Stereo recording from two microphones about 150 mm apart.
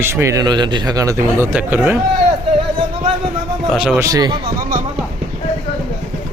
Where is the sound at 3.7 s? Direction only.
5° right (ahead or behind).